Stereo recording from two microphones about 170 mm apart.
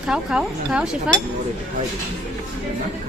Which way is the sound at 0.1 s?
5° right (ahead or behind).